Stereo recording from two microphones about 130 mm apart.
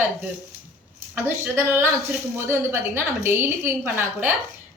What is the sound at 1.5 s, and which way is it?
A woman's voice, 15° right (ahead or behind).